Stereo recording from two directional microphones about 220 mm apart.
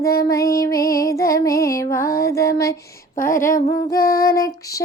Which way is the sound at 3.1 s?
40° left (ahead or behind).